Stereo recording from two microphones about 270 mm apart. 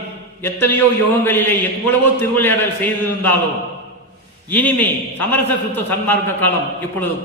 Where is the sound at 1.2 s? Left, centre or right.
Centre.